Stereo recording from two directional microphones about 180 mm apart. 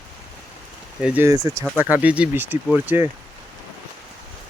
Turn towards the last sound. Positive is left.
turn(degrees=-10)  # may be behind; listen again after turning